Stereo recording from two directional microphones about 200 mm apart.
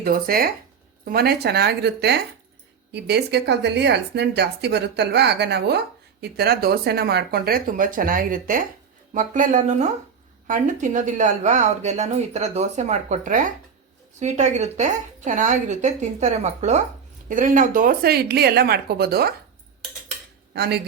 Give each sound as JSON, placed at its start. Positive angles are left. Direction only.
{"t": 0.0, "sound": "a woman's voice", "side_deg": -50}
{"t": 20.5, "sound": "speech", "side_deg": -55}